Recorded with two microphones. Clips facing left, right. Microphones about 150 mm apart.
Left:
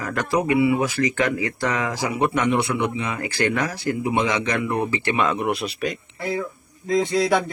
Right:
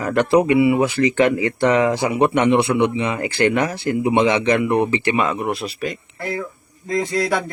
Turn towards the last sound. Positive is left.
turn(degrees=0)  # may be behind; listen again after turning